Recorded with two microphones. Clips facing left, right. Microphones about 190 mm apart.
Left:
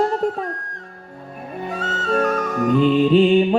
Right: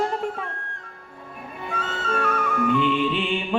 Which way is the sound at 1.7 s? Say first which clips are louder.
Left 5 dB; 40° left (ahead or behind).